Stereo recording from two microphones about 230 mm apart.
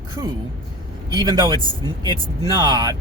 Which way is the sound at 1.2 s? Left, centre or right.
Centre.